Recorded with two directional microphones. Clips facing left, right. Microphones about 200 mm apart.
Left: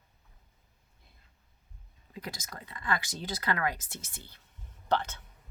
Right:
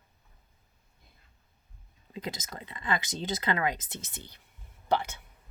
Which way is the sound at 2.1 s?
20° right (ahead or behind).